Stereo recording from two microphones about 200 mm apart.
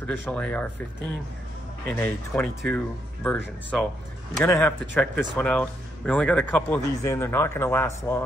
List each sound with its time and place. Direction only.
0.0 s speech: 5° left (ahead or behind)
1.9 s speech: 5° left (ahead or behind)
4.5 s speech: 10° left (ahead or behind)